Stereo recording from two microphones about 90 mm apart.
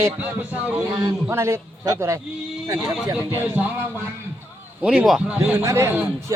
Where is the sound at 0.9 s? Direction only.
30° right (ahead or behind).